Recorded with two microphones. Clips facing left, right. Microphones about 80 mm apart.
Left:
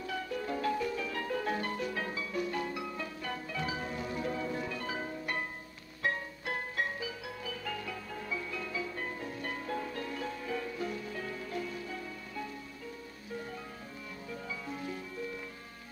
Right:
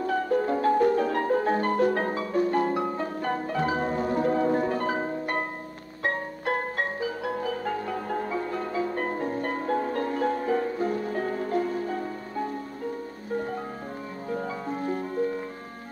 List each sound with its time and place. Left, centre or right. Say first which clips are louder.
0.0 s music: right 12 dB; right